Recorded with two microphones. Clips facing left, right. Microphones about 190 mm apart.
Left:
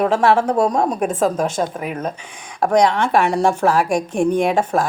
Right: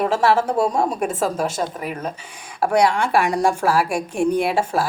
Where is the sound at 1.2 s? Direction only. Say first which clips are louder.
Left 3 dB; 45° left (ahead or behind).